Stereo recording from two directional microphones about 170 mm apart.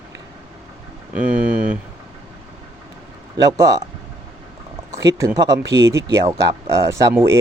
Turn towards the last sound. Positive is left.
turn(degrees=-15)  # may be behind; listen again after turning